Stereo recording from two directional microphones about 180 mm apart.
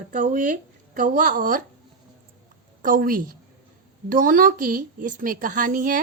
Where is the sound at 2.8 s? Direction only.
50° right (ahead or behind).